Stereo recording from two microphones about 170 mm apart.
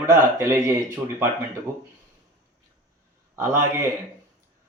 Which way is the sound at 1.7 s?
20° right (ahead or behind).